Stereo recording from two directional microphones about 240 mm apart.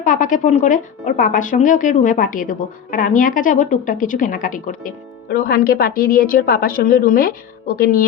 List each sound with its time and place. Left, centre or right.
0.0 s a woman's voice: left